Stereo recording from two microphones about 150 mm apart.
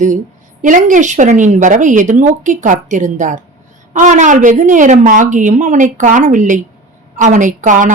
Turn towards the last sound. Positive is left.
turn(degrees=-60)  # may be behind; listen again after turning